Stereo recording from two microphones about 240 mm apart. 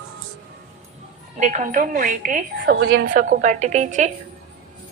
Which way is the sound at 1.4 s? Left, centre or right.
Right.